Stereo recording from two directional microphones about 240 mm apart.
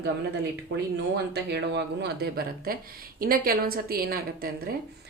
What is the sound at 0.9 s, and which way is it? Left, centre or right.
A woman's voice, right.